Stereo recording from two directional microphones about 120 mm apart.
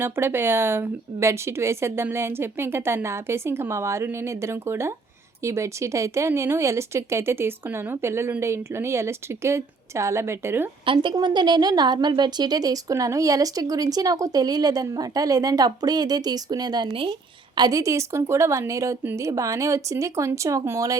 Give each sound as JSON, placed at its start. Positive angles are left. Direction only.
{"t": 0.0, "sound": "speech", "side_deg": -20}
{"t": 10.8, "sound": "a woman's voice", "side_deg": -45}